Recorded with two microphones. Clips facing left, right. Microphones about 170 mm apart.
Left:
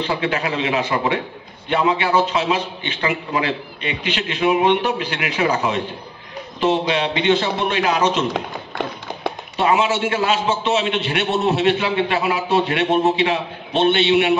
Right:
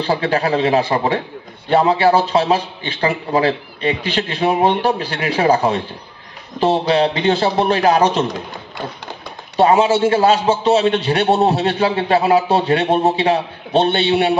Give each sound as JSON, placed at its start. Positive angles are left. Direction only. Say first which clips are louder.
{"t": 0.0, "sound": "a man's voice", "louder": "right 4 dB", "side_deg": -35}
{"t": 9.6, "sound": "a man's voice", "louder": "right 5 dB", "side_deg": -35}